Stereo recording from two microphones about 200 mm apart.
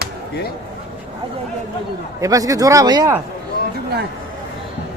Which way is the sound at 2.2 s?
15° right (ahead or behind).